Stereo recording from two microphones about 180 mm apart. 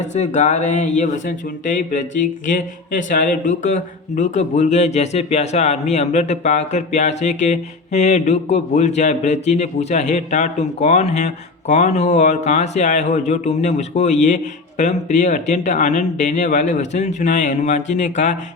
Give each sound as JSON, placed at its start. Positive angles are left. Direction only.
{"t": 0.0, "sound": "speech", "side_deg": 40}